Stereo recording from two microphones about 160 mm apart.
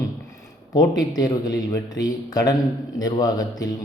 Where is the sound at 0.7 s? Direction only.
25° left (ahead or behind).